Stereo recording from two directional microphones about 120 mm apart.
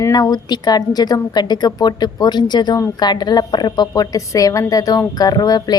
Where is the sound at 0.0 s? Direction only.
35° left (ahead or behind).